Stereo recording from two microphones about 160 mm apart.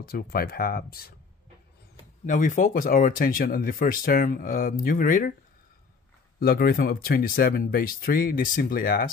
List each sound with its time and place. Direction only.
0.0 s speech: 70° left (ahead or behind)
2.2 s speech: 55° left (ahead or behind)
6.4 s speech: 70° left (ahead or behind)